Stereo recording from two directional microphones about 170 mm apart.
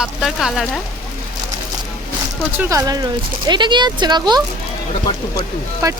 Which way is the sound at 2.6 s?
20° right (ahead or behind).